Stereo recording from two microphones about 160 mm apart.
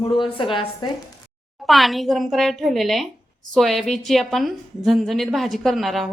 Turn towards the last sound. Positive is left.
turn(degrees=0)  # may be behind; listen again after turning